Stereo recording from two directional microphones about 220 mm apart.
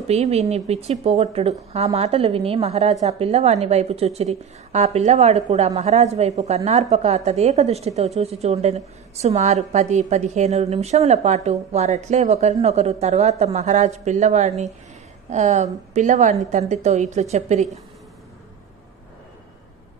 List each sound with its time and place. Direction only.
0.1 s a woman's voice: 30° right (ahead or behind)